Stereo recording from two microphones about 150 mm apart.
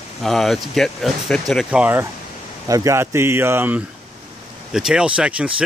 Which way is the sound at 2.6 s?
20° right (ahead or behind).